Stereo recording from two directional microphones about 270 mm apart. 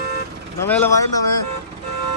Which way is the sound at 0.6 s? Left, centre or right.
Centre.